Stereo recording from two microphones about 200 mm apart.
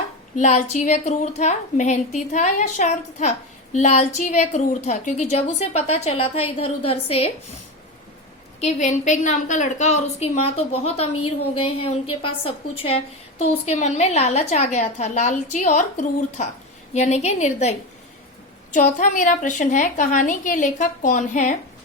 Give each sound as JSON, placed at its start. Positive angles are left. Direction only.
{"t": 0.3, "sound": "a woman's voice", "side_deg": 35}
{"t": 8.6, "sound": "a woman's voice", "side_deg": 35}
{"t": 11.1, "sound": "a woman's voice", "side_deg": 90}
{"t": 11.8, "sound": "a woman's voice", "side_deg": 30}